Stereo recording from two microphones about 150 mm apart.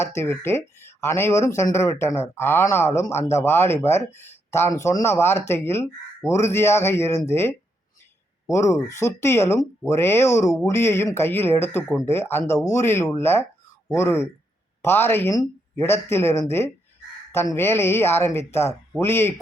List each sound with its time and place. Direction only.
0.0 s speech: 15° left (ahead or behind)